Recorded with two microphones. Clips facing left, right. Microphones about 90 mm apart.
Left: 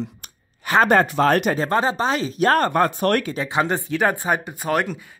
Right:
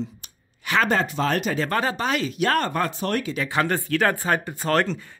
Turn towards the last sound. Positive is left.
turn(degrees=10)  # may be behind; listen again after turning